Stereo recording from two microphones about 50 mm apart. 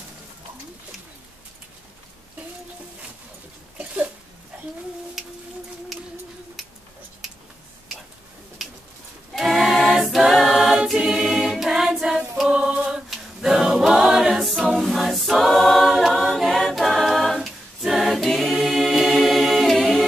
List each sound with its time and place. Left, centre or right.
3.7 s a sound: right
9.3 s a capella: centre
10.8 s choir: centre
11.1 s choir: centre
12.4 s music: right
12.8 s a capella: centre
13.7 s choir: centre
14.7 s a capella: centre